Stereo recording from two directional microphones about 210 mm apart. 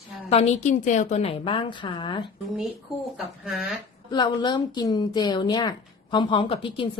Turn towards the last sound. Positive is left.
turn(degrees=25)  # may be behind; listen again after turning